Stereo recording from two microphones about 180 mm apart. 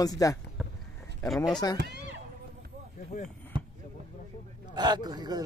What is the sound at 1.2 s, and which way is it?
Speech, centre (ahead or behind).